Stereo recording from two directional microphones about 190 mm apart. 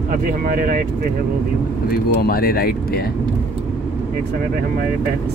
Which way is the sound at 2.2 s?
50° left (ahead or behind).